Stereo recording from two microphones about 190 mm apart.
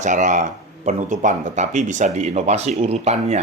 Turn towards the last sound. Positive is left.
turn(degrees=-35)  # may be behind; listen again after turning